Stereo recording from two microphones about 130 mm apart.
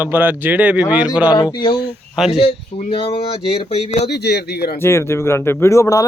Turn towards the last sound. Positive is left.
turn(degrees=25)  # may be behind; listen again after turning